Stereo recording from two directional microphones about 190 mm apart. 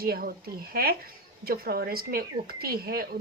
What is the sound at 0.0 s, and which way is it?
A woman's voice, 50° right (ahead or behind).